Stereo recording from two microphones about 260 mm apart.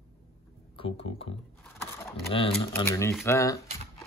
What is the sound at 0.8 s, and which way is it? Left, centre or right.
Speech, left.